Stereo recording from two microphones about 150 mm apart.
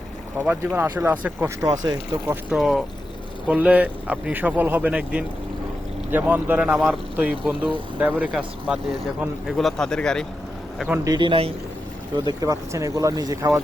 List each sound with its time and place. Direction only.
0.3 s speech: 15° right (ahead or behind)
1.6 s speech: 25° right (ahead or behind)
2.2 s speech: 10° right (ahead or behind)
2.6 s speech: centre (ahead or behind)
10.8 s speech: 15° right (ahead or behind)
11.1 s speech: 30° right (ahead or behind)
12.4 s speech: 20° right (ahead or behind)